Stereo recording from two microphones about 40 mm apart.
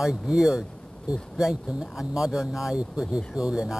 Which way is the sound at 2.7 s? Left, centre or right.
Right.